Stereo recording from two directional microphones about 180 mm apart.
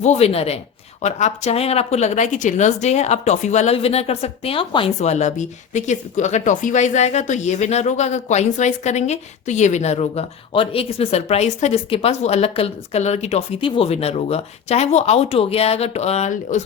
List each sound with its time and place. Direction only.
0.0 s a woman's voice: 40° left (ahead or behind)